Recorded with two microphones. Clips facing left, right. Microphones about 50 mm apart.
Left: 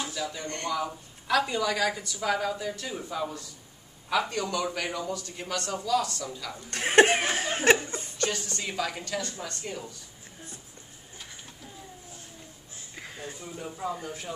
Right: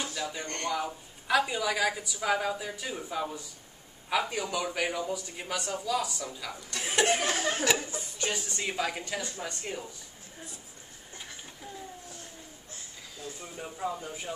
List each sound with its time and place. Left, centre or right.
0.0 s a sound: centre
0.7 s a woman's voice: centre
6.7 s speech: left
8.2 s a woman's voice: centre
12.9 s a sound: left
13.4 s a woman's voice: centre